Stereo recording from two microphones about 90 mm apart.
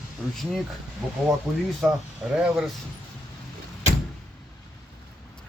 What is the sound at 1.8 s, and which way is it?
Speech, 5° right (ahead or behind).